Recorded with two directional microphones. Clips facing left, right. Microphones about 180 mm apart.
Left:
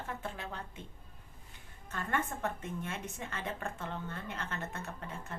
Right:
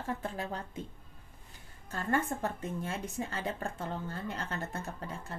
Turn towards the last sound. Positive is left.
turn(degrees=-35)  # may be behind; listen again after turning